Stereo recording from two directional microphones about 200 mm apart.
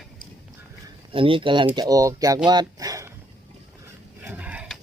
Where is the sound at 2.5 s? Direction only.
20° right (ahead or behind).